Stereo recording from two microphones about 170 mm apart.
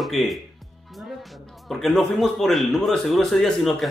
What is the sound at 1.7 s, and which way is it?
Speech, centre (ahead or behind).